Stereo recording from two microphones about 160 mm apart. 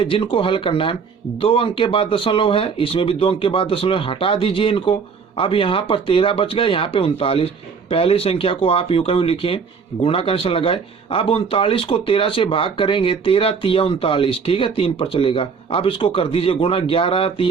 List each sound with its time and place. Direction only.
0.0 s speech: 35° left (ahead or behind)